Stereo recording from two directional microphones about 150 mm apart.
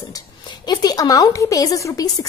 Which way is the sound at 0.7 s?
25° left (ahead or behind).